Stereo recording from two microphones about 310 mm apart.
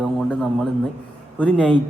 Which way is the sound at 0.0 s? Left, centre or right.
Centre.